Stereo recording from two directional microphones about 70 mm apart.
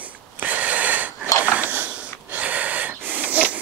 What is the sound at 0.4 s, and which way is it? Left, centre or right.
Snort, right.